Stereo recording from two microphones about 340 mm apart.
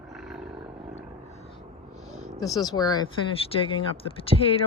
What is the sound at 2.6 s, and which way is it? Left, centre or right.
Speech, centre.